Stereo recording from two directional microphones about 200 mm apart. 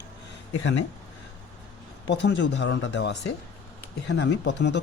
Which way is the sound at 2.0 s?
60° left (ahead or behind).